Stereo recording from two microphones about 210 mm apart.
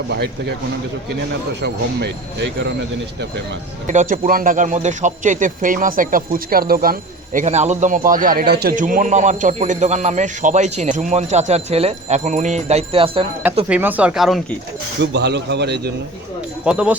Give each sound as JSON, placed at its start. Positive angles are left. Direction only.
{"t": 0.1, "sound": "a man's voice", "side_deg": -55}
{"t": 3.8, "sound": "a man's voice", "side_deg": -35}
{"t": 7.3, "sound": "a man's voice", "side_deg": -35}
{"t": 13.7, "sound": "speech", "side_deg": -5}
{"t": 15.0, "sound": "a man's voice", "side_deg": -55}
{"t": 16.6, "sound": "speech", "side_deg": -5}